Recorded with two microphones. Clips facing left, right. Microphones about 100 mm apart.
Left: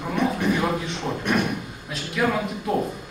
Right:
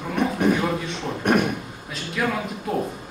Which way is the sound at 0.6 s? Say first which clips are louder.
Even; 5° left (ahead or behind).